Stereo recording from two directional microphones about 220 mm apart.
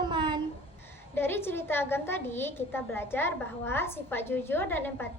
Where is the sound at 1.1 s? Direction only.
10° left (ahead or behind).